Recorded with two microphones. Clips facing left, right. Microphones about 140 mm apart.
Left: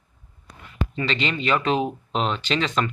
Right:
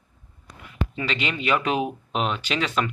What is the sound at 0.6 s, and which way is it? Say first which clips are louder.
Speech: left 2 dB; 10° right (ahead or behind).